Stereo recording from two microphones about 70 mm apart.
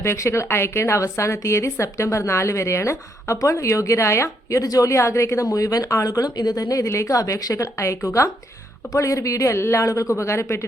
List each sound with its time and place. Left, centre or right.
0.0 s a woman's voice: left